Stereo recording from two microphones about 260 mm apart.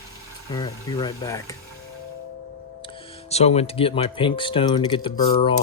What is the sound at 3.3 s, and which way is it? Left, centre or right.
Speech, left.